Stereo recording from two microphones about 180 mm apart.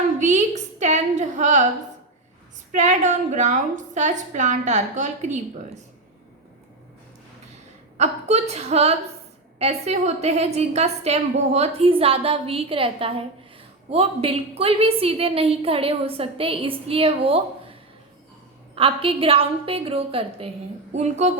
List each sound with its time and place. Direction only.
0.2 s a sound: 40° right (ahead or behind)
2.7 s a woman's voice: 40° right (ahead or behind)
7.9 s a woman's voice: 40° right (ahead or behind)
18.7 s a woman's voice: 30° right (ahead or behind)